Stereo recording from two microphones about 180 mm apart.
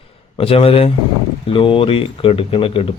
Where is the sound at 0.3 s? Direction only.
30° left (ahead or behind).